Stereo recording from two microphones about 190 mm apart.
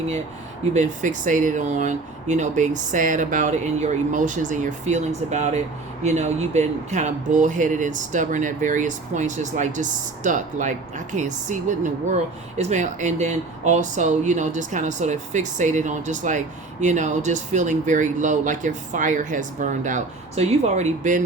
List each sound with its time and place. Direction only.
0.7 s speech: 40° right (ahead or behind)